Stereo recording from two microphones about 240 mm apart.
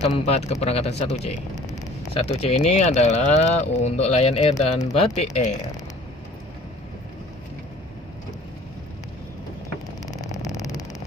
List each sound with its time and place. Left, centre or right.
0.0 s speech: left
10.1 s vehicle: centre